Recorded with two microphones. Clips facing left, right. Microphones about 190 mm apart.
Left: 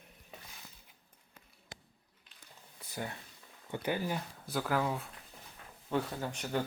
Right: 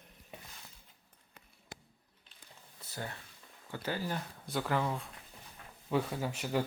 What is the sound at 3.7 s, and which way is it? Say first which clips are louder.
Speech: left 2 dB; 15° left (ahead or behind).